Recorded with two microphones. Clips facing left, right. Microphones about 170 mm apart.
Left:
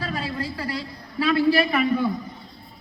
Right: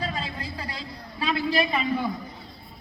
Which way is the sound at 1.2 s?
20° right (ahead or behind).